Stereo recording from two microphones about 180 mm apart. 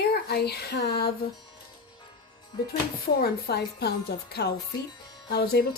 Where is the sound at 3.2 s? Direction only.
60° left (ahead or behind).